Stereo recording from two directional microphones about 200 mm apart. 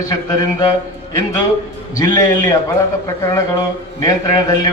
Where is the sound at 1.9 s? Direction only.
15° left (ahead or behind).